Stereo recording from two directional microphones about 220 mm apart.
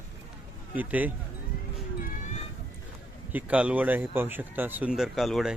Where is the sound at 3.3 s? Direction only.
5° right (ahead or behind).